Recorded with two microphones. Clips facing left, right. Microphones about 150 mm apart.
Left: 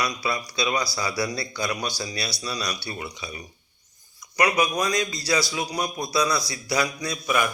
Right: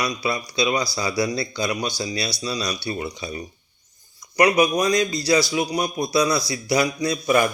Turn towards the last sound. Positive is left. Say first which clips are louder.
# right 6 dB
turn(degrees=-35)  # may be behind; listen again after turning